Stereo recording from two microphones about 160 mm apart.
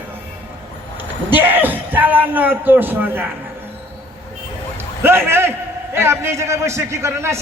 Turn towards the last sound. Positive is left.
turn(degrees=-15)  # may be behind; listen again after turning